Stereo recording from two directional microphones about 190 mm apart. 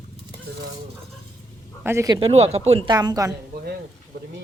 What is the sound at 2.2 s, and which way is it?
Speech, 30° right (ahead or behind).